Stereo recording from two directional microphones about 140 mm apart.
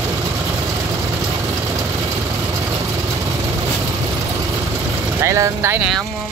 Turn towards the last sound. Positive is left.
turn(degrees=-20)  # may be behind; listen again after turning